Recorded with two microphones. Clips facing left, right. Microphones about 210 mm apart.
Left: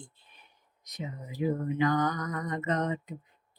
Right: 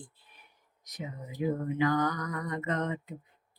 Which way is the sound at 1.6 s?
20° left (ahead or behind).